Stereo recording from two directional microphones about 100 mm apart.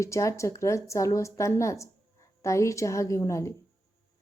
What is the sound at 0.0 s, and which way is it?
A woman's voice, 30° left (ahead or behind).